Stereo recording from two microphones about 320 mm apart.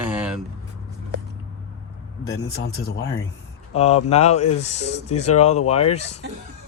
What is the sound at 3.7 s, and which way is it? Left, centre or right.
Speech, centre.